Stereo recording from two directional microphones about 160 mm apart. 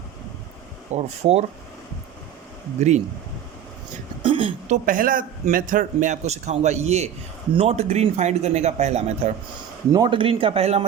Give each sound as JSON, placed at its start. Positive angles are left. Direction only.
{"t": 0.9, "sound": "speech", "side_deg": -40}
{"t": 2.8, "sound": "a man's voice", "side_deg": -45}
{"t": 4.2, "sound": "speech", "side_deg": -30}
{"t": 4.7, "sound": "a man's voice", "side_deg": -60}
{"t": 9.9, "sound": "speech", "side_deg": -30}